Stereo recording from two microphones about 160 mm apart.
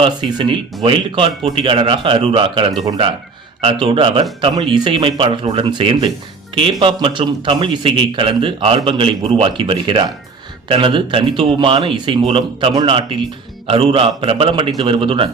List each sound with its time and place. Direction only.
0.0 s a man's voice: 30° right (ahead or behind)